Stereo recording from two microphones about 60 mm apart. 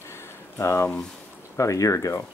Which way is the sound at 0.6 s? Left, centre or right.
Left.